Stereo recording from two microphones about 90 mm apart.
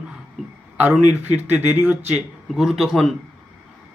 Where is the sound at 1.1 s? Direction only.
20° right (ahead or behind).